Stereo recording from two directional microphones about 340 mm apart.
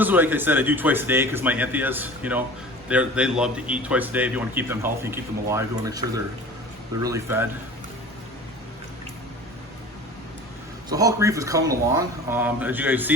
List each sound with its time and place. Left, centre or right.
0.0 s speech: centre
10.8 s speech: centre